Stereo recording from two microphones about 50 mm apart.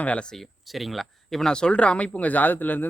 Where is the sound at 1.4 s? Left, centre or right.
Centre; by 2.8 s left.